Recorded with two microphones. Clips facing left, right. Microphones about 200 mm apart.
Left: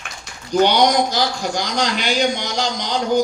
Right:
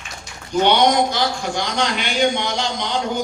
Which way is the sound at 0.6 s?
40° left (ahead or behind).